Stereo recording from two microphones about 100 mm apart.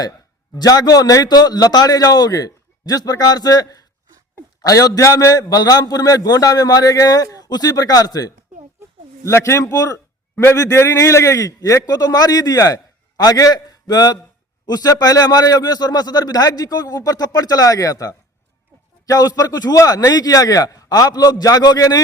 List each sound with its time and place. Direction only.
0.5 s a man's voice: 40° left (ahead or behind)